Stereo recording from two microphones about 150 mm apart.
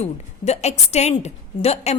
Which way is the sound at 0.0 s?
45° left (ahead or behind).